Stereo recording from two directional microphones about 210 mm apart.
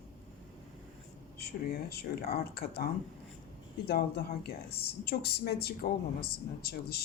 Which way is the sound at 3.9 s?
50° left (ahead or behind).